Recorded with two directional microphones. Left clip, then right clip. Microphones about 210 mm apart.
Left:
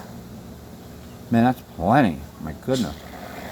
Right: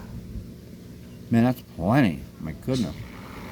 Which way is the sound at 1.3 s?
50° right (ahead or behind).